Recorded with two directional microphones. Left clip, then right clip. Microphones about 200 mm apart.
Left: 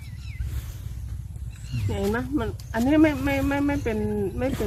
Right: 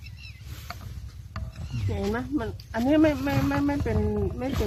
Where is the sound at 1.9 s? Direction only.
10° right (ahead or behind).